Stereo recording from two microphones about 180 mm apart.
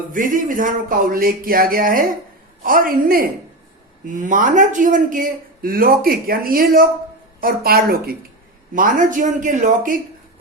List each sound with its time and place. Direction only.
0.1 s a man's voice: 50° right (ahead or behind)